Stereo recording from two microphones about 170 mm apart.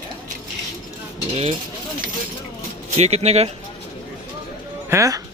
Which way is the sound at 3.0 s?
40° right (ahead or behind).